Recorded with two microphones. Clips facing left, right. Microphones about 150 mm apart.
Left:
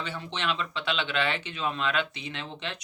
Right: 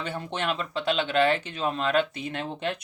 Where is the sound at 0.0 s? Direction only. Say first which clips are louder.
Right 3 dB; 50° right (ahead or behind).